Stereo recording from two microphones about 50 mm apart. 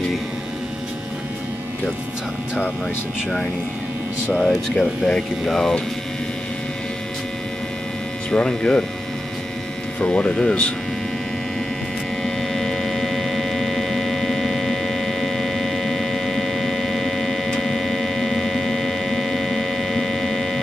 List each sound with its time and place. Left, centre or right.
4.4 s speech: centre
8.3 s speech: centre
9.9 s speech: centre
12.2 s hum: centre